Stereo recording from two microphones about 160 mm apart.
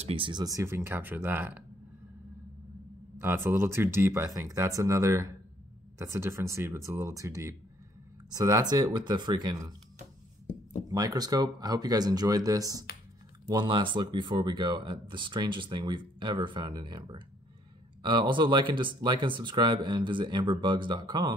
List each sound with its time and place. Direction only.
0.0 s speech: 35° right (ahead or behind); by 1.6 s 10° right (ahead or behind)
3.2 s speech: 15° right (ahead or behind)
10.9 s speech: 20° right (ahead or behind)